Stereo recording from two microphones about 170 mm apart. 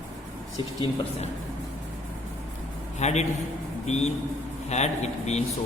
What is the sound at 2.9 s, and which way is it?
Speech, 40° left (ahead or behind).